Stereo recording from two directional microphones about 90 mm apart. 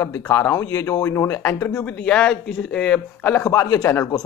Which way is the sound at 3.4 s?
35° left (ahead or behind).